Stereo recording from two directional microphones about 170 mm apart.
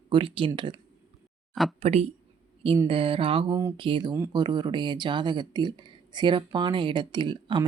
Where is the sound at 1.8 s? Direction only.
35° right (ahead or behind).